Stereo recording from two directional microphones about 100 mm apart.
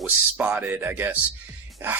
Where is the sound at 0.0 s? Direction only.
20° right (ahead or behind).